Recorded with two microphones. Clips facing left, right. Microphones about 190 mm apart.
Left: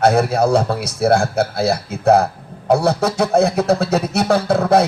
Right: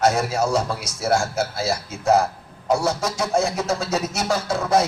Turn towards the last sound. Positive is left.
turn(degrees=60)  # may be behind; listen again after turning